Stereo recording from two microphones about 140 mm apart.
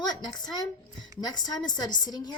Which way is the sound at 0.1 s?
30° left (ahead or behind).